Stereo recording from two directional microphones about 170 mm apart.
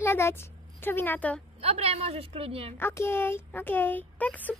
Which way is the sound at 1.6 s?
35° right (ahead or behind).